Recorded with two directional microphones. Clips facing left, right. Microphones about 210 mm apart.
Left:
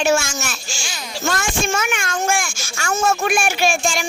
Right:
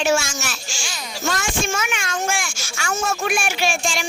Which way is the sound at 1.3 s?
50° left (ahead or behind).